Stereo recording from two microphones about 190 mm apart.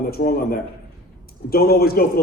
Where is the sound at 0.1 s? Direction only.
55° left (ahead or behind).